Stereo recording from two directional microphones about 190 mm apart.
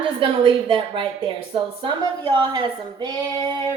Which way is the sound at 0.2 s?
25° right (ahead or behind).